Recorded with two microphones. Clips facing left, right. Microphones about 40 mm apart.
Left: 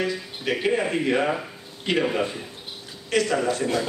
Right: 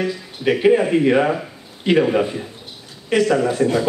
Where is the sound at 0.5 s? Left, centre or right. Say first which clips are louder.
Right 8 dB; centre.